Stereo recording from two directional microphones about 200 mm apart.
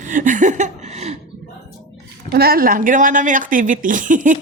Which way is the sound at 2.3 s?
50° right (ahead or behind).